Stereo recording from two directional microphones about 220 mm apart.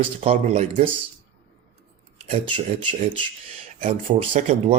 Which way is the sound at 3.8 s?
35° right (ahead or behind).